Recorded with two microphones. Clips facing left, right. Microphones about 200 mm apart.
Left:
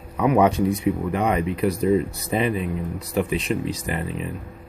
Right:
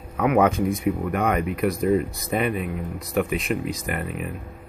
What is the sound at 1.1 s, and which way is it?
Speech, 25° left (ahead or behind).